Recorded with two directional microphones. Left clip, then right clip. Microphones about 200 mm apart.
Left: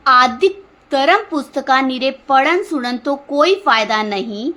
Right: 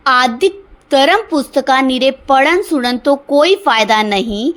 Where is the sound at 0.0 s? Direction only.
25° right (ahead or behind).